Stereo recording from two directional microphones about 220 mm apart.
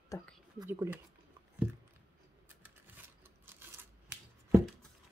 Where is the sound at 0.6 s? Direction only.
10° right (ahead or behind).